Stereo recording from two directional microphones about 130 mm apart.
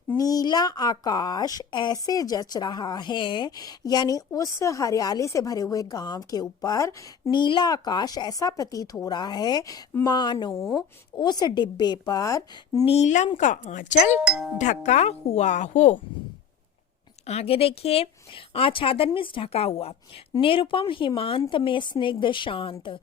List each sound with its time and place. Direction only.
0.2 s a woman's voice: 30° left (ahead or behind)
12.8 s speech: 55° left (ahead or behind)
14.3 s speech: 5° right (ahead or behind)
14.6 s speech: 65° left (ahead or behind)
17.2 s a woman's voice: 50° left (ahead or behind)